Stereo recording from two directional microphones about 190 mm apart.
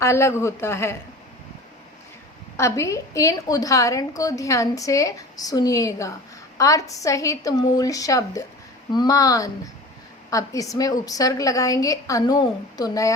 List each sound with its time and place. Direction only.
0.0 s a woman's voice: 15° left (ahead or behind)
2.6 s a woman's voice: 15° left (ahead or behind)